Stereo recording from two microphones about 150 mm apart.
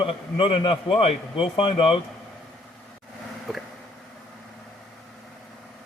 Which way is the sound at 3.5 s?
Centre (ahead or behind).